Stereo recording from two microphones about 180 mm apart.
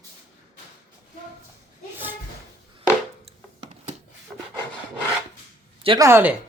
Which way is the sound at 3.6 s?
40° right (ahead or behind).